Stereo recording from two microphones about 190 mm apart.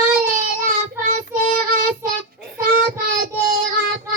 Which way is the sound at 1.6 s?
45° right (ahead or behind).